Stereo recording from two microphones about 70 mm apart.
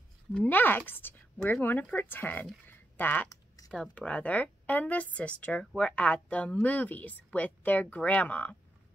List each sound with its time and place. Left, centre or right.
0.5 s speech: left
2.6 s a sound: left
3.6 s speech: centre
3.9 s speech: centre